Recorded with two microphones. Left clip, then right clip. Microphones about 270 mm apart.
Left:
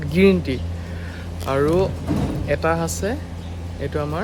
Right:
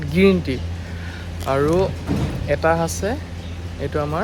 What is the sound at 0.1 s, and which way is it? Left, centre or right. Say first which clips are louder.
Speech: even; centre.